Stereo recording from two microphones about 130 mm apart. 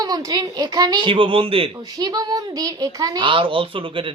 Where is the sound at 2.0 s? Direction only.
30° right (ahead or behind).